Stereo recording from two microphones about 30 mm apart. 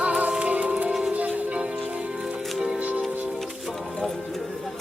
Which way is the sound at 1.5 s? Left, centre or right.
Right.